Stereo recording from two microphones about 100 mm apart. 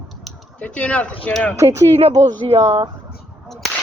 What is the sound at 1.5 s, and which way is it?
Speech, 30° right (ahead or behind).